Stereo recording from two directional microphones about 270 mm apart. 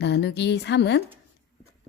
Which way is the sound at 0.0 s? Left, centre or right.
Left.